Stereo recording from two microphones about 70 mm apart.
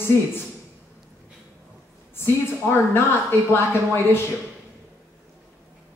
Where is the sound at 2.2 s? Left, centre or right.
Left.